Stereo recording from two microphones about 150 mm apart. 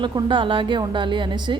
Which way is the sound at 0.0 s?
30° right (ahead or behind).